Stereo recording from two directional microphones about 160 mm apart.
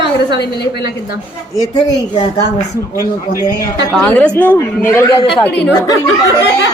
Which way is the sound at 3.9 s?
5° left (ahead or behind).